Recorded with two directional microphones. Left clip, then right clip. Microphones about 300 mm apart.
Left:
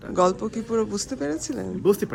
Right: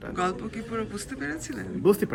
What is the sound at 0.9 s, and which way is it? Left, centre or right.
Speech, centre.